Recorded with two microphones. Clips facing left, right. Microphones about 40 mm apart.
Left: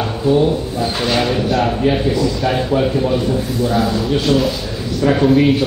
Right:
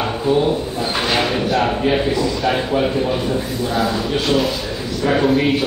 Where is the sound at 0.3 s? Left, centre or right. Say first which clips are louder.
Left 3 dB; centre.